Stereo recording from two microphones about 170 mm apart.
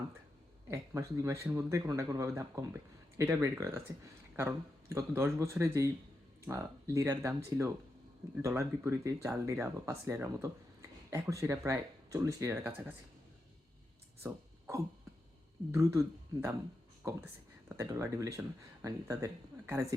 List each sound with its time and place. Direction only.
0.7 s speech: 15° right (ahead or behind)
15.7 s speech: 20° right (ahead or behind)